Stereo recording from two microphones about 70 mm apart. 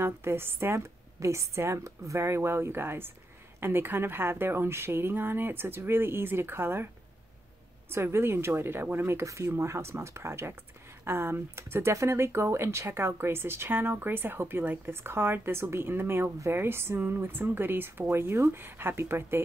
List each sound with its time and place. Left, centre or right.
0.0 s speech: right
7.9 s speech: right
9.2 s speech: right